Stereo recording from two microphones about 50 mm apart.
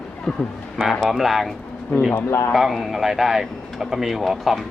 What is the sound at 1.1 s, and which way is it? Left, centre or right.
Speech, centre.